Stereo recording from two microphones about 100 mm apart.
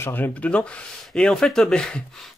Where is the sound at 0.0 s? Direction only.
20° left (ahead or behind).